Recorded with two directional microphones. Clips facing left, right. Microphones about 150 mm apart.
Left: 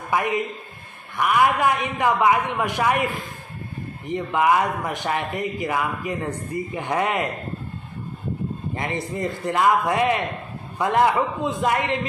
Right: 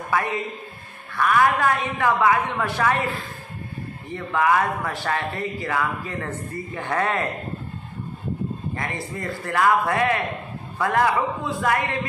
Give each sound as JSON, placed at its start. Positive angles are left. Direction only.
{"t": 0.1, "sound": "a man's voice", "side_deg": 15}
{"t": 8.7, "sound": "a man's voice", "side_deg": 20}